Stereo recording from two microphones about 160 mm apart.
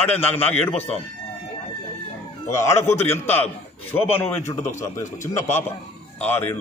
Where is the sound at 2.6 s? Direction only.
15° left (ahead or behind).